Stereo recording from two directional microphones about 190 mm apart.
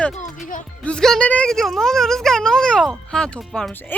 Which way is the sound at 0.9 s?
5° left (ahead or behind).